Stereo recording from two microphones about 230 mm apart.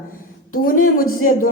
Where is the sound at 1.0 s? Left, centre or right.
Left.